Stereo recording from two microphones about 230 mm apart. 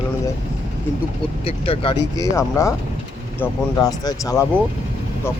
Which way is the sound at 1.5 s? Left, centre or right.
Left.